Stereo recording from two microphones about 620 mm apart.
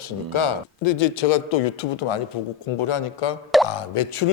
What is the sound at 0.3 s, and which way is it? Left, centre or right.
Speech, left.